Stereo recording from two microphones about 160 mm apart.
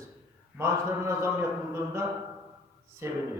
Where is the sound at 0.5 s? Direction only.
15° right (ahead or behind).